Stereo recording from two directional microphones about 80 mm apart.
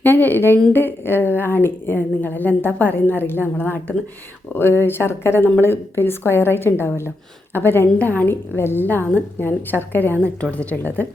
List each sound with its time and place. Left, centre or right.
0.0 s a woman's voice: left